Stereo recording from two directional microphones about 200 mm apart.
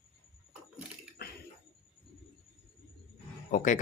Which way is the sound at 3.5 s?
40° left (ahead or behind).